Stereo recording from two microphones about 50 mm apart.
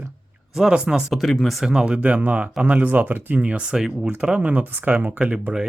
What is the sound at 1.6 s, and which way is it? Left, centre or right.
Speech, centre.